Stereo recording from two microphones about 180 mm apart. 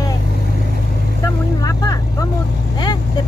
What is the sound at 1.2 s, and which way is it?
Speech, 20° left (ahead or behind).